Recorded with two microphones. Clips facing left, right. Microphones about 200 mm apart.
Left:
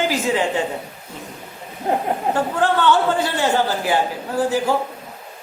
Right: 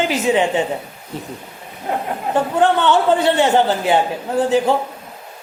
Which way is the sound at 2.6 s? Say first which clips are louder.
Right 3 dB; 20° right (ahead or behind).